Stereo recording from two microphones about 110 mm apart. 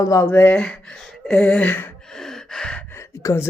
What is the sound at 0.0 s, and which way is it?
Speech, 30° left (ahead or behind).